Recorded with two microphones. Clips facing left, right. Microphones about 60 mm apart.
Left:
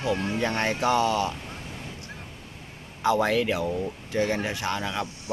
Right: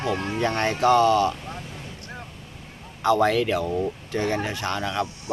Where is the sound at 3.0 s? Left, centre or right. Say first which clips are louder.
Right 3 dB; centre.